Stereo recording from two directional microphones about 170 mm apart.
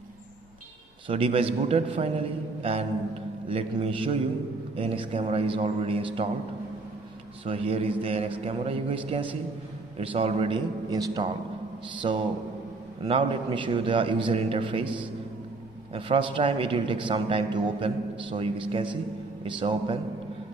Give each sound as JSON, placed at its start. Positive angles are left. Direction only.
{"t": 1.0, "sound": "a man's voice", "side_deg": -35}
{"t": 7.4, "sound": "a man's voice", "side_deg": -35}
{"t": 10.9, "sound": "a man's voice", "side_deg": -20}